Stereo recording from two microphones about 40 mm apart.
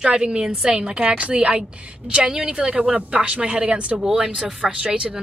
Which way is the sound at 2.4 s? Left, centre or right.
Right.